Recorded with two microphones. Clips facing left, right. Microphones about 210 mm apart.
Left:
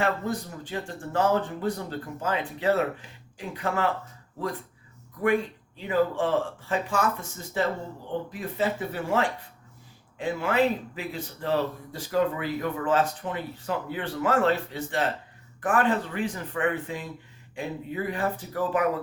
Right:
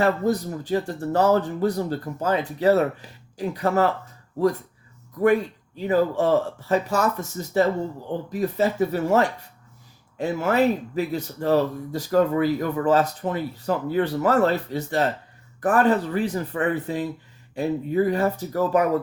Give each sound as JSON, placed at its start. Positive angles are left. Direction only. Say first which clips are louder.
{"t": 0.0, "sound": "speech", "louder": "right 6 dB", "side_deg": -40}
{"t": 5.7, "sound": "speech", "louder": "right 4 dB", "side_deg": -40}